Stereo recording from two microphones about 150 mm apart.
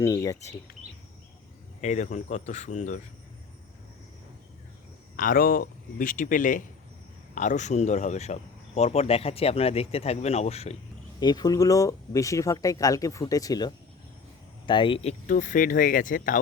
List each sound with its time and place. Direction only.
0.0 s speech: 20° left (ahead or behind)
1.8 s speech: 50° left (ahead or behind)
5.1 s speech: 70° left (ahead or behind); by 10.8 s 45° left (ahead or behind)
11.2 s speech: 25° left (ahead or behind)
15.3 s speech: 60° left (ahead or behind)